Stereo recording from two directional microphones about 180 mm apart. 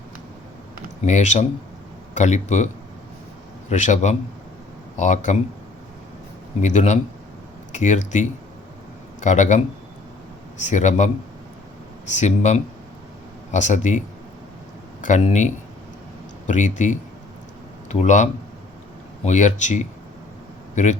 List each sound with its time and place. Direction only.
1.0 s speech: 40° left (ahead or behind)
3.7 s speech: 40° left (ahead or behind)
6.6 s speech: 40° left (ahead or behind)
10.6 s speech: 40° left (ahead or behind)
15.0 s speech: 40° left (ahead or behind)